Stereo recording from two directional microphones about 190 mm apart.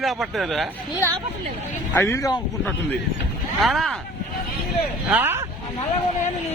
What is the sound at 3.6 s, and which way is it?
Speech, centre (ahead or behind).